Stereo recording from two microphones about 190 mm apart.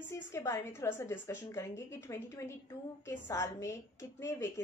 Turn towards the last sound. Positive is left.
turn(degrees=15)  # may be behind; listen again after turning